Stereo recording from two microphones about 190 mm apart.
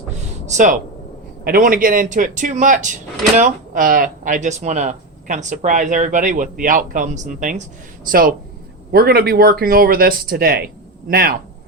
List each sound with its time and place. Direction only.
0.4 s speech: 40° right (ahead or behind)
8.9 s speech: 55° right (ahead or behind)